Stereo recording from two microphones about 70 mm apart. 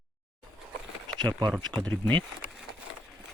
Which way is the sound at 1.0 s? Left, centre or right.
Right.